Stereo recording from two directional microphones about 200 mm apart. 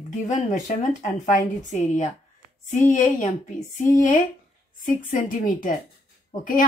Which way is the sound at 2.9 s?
40° left (ahead or behind).